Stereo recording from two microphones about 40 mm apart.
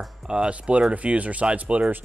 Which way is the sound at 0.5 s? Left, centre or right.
Right.